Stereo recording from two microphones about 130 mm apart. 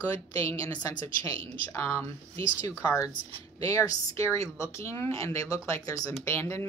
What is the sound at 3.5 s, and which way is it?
Speech, 25° left (ahead or behind).